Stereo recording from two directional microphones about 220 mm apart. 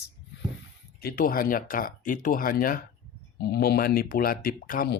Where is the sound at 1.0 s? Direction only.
40° left (ahead or behind).